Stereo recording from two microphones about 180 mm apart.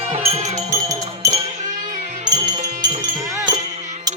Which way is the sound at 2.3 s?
40° right (ahead or behind).